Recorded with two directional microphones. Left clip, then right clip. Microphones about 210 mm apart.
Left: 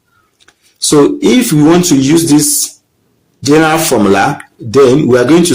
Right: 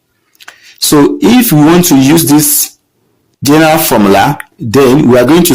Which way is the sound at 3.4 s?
35° right (ahead or behind).